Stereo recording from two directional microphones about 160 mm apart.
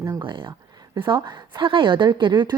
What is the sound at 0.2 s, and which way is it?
A woman's voice, 30° right (ahead or behind).